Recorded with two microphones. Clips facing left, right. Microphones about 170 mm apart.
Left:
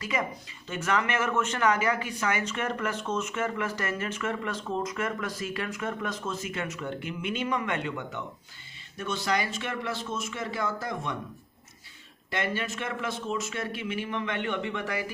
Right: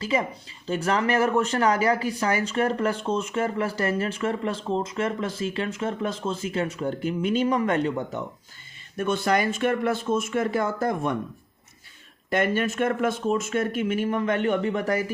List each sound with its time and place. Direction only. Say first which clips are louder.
0.0 s speech: right 5 dB; 30° right (ahead or behind)
9.0 s speech: right 6 dB; 55° right (ahead or behind)
12.3 s speech: right 7 dB; 50° right (ahead or behind)